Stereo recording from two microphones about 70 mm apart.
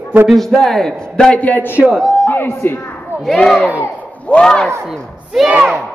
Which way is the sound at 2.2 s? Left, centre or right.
Left.